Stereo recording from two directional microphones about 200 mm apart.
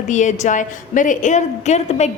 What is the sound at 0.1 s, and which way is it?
A woman's voice, 35° left (ahead or behind).